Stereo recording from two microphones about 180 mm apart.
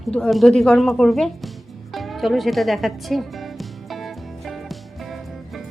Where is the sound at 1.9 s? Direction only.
Centre (ahead or behind).